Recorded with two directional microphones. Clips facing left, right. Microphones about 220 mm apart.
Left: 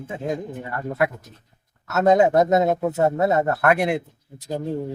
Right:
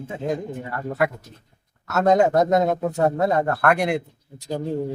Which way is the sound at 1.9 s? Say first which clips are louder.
Left 1 dB; 5° left (ahead or behind).